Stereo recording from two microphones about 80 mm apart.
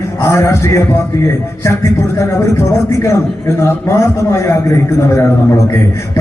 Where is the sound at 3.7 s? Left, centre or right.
Left.